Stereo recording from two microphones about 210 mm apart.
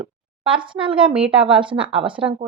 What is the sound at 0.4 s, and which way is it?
Speech, 25° right (ahead or behind).